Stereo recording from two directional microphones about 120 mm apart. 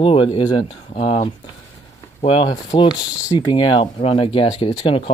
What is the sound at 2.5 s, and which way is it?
Speech, 35° left (ahead or behind).